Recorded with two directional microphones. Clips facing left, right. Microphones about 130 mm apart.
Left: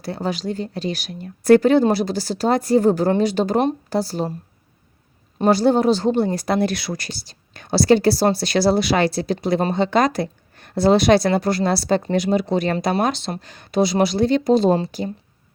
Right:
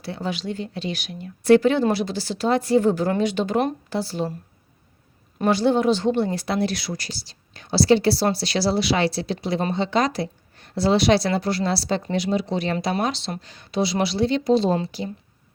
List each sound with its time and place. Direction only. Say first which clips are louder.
0.0 s speech: left 4 dB; 40° left (ahead or behind)
5.4 s speech: left 3 dB; 40° left (ahead or behind)